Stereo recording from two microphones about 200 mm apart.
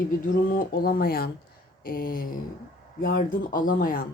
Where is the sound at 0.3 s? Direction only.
45° left (ahead or behind).